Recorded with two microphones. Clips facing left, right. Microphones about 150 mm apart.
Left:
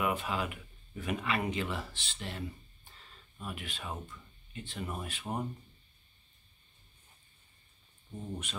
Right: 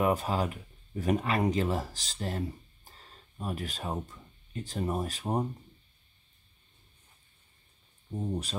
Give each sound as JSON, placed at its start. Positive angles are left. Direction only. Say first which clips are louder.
{"t": 0.0, "sound": "speech", "louder": "right 5 dB", "side_deg": -40}
{"t": 8.2, "sound": "speech", "louder": "right 7 dB", "side_deg": -35}